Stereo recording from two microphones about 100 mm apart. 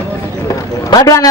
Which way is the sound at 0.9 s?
40° left (ahead or behind).